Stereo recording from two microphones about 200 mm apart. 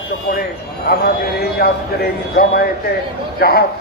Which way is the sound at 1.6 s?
55° left (ahead or behind).